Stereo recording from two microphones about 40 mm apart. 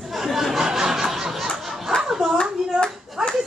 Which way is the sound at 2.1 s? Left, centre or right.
Centre.